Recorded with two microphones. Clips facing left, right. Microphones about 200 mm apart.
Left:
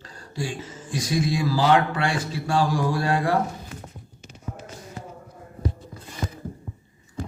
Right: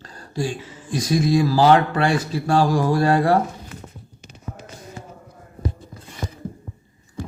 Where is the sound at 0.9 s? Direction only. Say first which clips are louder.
Right 6 dB; 40° right (ahead or behind).